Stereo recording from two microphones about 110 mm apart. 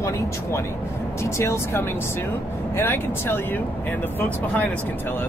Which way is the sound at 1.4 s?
20° left (ahead or behind).